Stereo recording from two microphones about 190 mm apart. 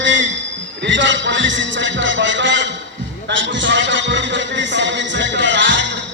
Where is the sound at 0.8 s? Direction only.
75° right (ahead or behind).